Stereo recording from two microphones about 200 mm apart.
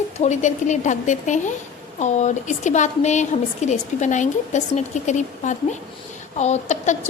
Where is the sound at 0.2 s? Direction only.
35° left (ahead or behind).